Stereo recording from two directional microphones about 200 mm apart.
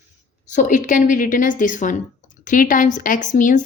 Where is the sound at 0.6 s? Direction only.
40° left (ahead or behind).